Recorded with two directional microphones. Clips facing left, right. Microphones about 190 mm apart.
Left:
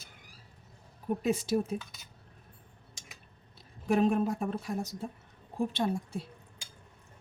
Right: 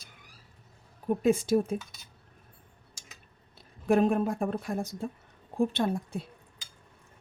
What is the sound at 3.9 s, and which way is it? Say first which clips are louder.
Speech: right 2 dB; 55° right (ahead or behind).